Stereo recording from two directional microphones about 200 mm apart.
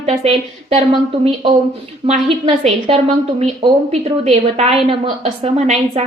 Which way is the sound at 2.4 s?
30° right (ahead or behind).